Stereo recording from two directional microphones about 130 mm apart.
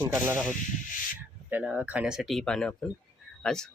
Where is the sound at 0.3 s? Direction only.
20° right (ahead or behind).